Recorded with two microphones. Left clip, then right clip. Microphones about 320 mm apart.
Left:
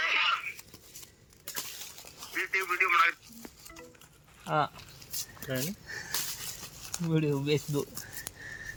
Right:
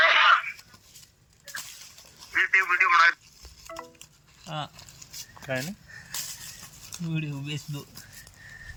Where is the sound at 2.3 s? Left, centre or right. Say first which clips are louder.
Right 9 dB; centre.